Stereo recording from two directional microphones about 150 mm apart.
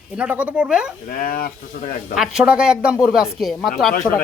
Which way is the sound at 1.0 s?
75° left (ahead or behind).